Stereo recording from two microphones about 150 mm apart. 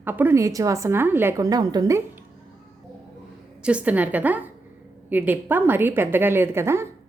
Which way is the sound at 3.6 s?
10° right (ahead or behind).